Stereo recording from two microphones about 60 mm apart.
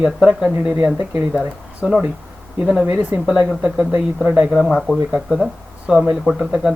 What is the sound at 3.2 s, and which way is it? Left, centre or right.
Speech, centre.